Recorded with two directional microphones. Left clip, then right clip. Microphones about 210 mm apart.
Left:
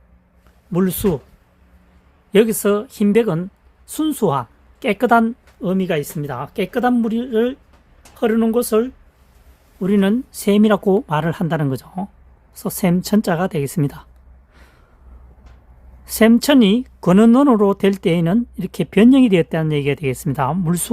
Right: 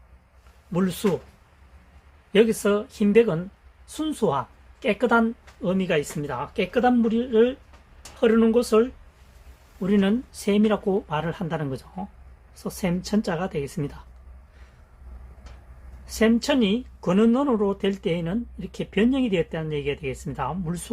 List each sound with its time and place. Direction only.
0.7 s speech: 55° left (ahead or behind)
2.3 s speech: 60° left (ahead or behind)
16.0 s speech: 60° left (ahead or behind)